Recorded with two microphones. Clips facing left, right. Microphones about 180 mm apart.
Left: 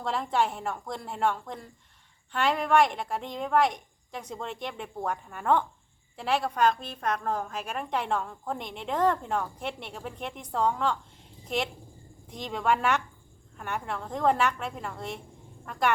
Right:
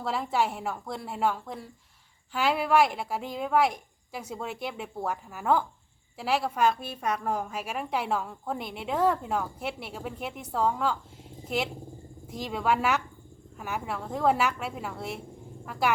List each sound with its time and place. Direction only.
0.0 s a woman's voice: 5° right (ahead or behind)